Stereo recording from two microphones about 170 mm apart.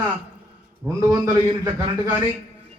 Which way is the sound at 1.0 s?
20° right (ahead or behind).